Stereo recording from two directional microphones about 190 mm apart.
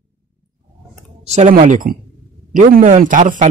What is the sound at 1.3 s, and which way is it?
A man's voice, 40° right (ahead or behind).